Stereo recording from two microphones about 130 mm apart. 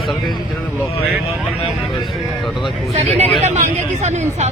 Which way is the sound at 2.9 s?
55° right (ahead or behind).